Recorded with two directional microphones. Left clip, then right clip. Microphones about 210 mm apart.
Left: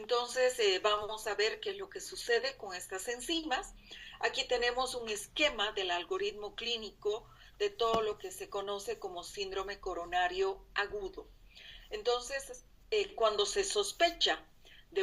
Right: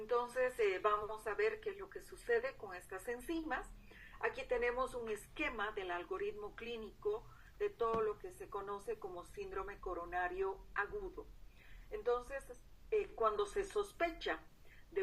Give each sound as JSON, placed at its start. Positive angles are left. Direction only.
{"t": 0.1, "sound": "a woman's voice", "side_deg": 35}
{"t": 1.2, "sound": "a woman's voice", "side_deg": 45}